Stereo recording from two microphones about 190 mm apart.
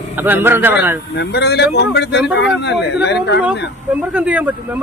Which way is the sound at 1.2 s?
60° left (ahead or behind).